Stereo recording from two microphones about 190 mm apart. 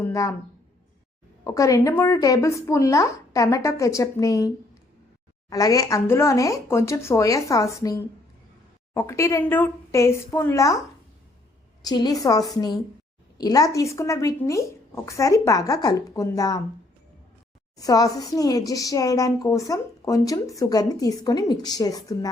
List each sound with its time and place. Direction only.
0.0 s a woman's voice: 15° left (ahead or behind)
1.5 s a woman's voice: 15° left (ahead or behind)
5.5 s a woman's voice: 20° left (ahead or behind)
11.8 s a woman's voice: 20° left (ahead or behind)
17.7 s speech: 20° left (ahead or behind)